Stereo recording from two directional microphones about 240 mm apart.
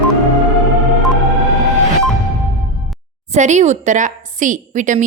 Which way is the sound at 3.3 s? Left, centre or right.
Right.